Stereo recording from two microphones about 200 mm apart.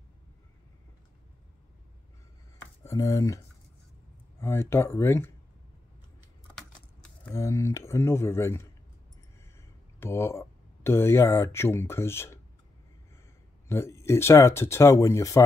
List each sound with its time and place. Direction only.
2.8 s speech: 15° left (ahead or behind)
4.4 s speech: 15° left (ahead or behind)
6.5 s keys jangling: 5° left (ahead or behind)
7.3 s speech: 15° left (ahead or behind)
13.7 s speech: 15° left (ahead or behind)